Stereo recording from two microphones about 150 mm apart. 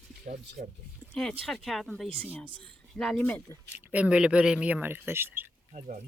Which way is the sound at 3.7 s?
10° right (ahead or behind).